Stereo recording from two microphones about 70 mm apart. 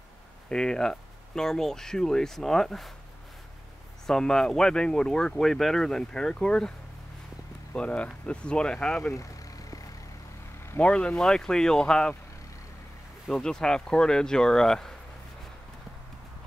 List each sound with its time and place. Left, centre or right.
0.5 s speech: centre
4.1 s speech: centre
7.7 s speech: centre
9.1 s vehicle: left
10.8 s speech: centre
13.3 s speech: centre